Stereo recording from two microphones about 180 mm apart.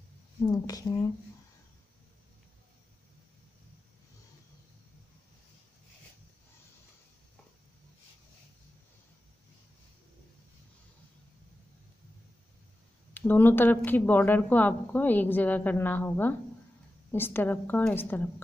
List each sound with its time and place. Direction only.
0.5 s speech: 20° left (ahead or behind)
13.1 s speech: 10° left (ahead or behind)